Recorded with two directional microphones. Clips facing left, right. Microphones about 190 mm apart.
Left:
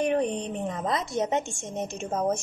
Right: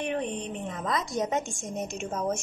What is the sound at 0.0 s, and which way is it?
A woman's voice, 40° left (ahead or behind).